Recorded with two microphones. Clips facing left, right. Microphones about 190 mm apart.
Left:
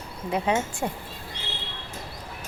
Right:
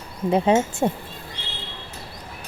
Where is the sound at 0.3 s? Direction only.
30° right (ahead or behind).